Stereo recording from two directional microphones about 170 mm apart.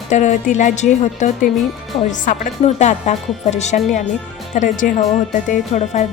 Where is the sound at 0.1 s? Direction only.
45° left (ahead or behind).